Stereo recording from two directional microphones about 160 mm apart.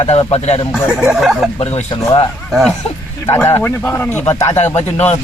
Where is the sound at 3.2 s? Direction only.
15° left (ahead or behind).